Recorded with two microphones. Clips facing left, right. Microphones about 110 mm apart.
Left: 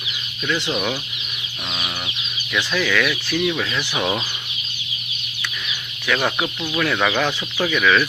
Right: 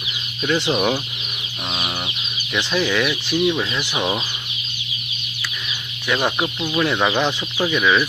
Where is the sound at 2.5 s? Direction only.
30° right (ahead or behind); by 4.2 s 10° right (ahead or behind).